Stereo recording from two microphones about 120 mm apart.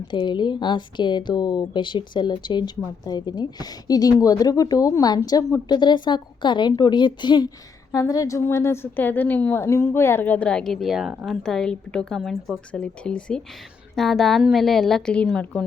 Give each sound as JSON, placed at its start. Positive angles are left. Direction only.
{"t": 0.1, "sound": "a woman's voice", "side_deg": 40}
{"t": 7.9, "sound": "a woman's voice", "side_deg": 30}
{"t": 11.3, "sound": "a woman's voice", "side_deg": 5}